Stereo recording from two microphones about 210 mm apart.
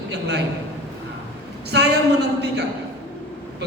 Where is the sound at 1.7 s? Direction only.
50° right (ahead or behind).